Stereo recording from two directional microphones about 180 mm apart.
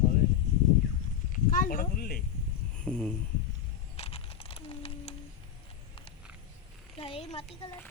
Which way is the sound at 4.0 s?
35° left (ahead or behind).